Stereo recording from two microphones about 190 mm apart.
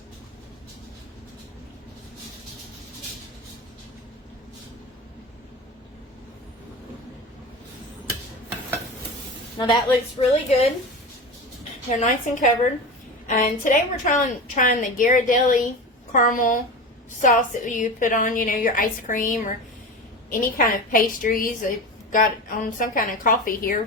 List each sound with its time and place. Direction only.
9.6 s a woman's voice: 25° left (ahead or behind)
11.9 s a woman's voice: 40° left (ahead or behind)
20.9 s a woman's voice: 45° left (ahead or behind)